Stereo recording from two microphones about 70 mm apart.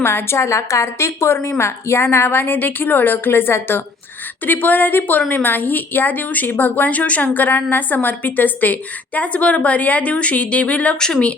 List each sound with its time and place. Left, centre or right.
0.0 s a woman's voice: left; by 11.3 s centre